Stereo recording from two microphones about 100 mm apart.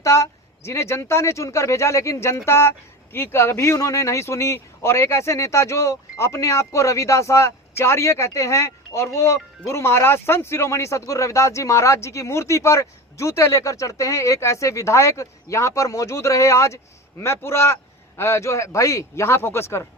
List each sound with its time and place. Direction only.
0.0 s speech: 30° left (ahead or behind)